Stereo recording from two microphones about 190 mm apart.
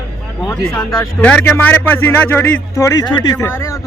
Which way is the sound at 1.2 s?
10° left (ahead or behind).